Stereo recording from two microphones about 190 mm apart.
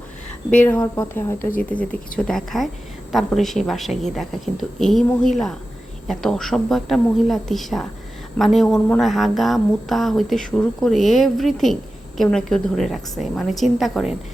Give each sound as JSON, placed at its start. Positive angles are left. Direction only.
{"t": 0.5, "sound": "speech", "side_deg": 5}
{"t": 1.4, "sound": "speech", "side_deg": 45}
{"t": 1.7, "sound": "speech", "side_deg": 5}